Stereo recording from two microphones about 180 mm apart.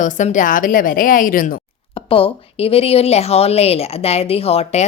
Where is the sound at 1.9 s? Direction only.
30° left (ahead or behind).